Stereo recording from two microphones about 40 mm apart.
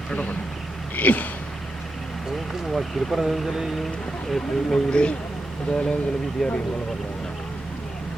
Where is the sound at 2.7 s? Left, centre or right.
Centre.